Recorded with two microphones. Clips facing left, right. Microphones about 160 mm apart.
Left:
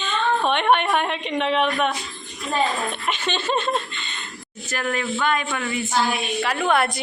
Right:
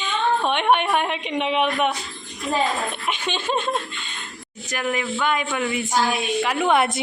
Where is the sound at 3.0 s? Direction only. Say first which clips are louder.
Left 1 dB; 10° right (ahead or behind).